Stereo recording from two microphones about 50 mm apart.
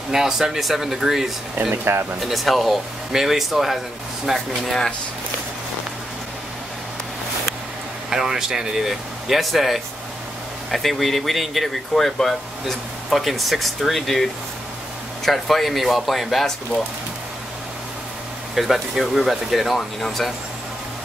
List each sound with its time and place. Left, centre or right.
0.1 s speech: centre
1.5 s speech: right
2.1 s speech: centre
8.1 s speech: centre
18.5 s speech: centre